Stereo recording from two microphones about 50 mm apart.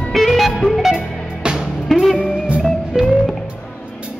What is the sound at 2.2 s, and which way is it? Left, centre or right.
Music, centre.